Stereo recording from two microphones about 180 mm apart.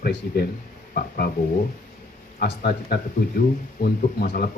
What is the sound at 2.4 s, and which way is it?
Speech, 60° left (ahead or behind).